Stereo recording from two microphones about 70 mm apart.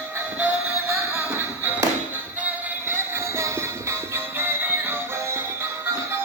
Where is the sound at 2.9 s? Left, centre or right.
Right.